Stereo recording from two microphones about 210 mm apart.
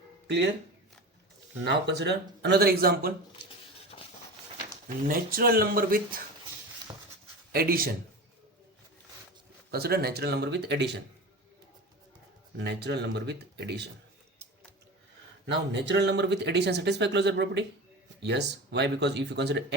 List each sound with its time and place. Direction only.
1.6 s speech: 55° right (ahead or behind)
3.9 s a sound: 35° left (ahead or behind)
5.0 s speech: 45° right (ahead or behind)
7.5 s speech: 45° right (ahead or behind)
9.7 s speech: 50° right (ahead or behind)
12.5 s speech: 55° right (ahead or behind)
15.4 s speech: 55° right (ahead or behind)